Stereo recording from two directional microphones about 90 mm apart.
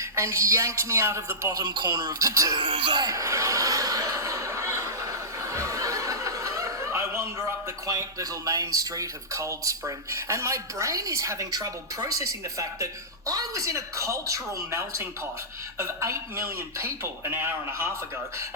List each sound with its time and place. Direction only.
0.0 s speech: 30° right (ahead or behind)
1.5 s speech: 50° right (ahead or behind)
2.6 s speech: 75° right (ahead or behind)
3.0 s chuckle: 35° right (ahead or behind)
7.9 s speech: 40° right (ahead or behind); by 17.8 s 25° right (ahead or behind)